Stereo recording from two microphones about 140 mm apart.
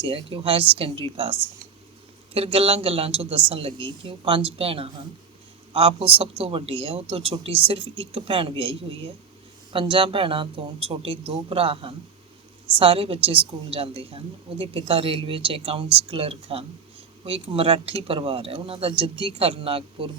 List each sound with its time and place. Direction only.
0.0 s a woman's voice: 40° right (ahead or behind)